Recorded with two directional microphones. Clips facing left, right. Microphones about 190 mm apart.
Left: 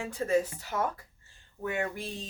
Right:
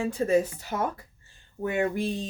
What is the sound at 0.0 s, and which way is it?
Speech, 20° right (ahead or behind).